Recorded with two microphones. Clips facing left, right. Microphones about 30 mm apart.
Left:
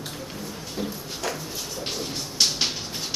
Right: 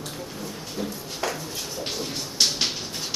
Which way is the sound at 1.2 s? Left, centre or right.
Centre.